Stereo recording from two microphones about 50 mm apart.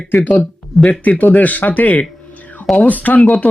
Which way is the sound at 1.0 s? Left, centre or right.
Left.